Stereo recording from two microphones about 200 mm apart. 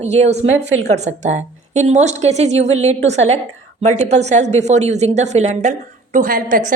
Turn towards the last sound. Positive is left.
turn(degrees=-40)  # may be behind; listen again after turning